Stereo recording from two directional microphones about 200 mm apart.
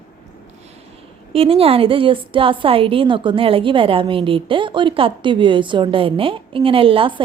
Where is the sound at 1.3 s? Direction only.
30° right (ahead or behind).